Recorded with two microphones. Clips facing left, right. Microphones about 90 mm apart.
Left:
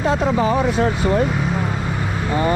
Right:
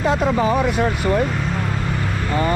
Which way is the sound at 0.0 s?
10° right (ahead or behind).